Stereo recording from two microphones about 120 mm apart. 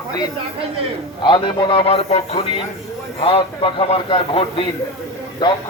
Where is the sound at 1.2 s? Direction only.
40° left (ahead or behind).